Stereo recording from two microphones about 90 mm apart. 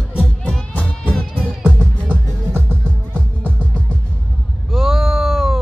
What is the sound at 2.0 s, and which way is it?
Music, 25° right (ahead or behind).